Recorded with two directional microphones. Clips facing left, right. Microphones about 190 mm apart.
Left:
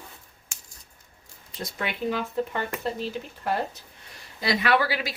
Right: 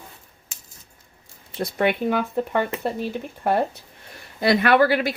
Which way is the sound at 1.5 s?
60° right (ahead or behind).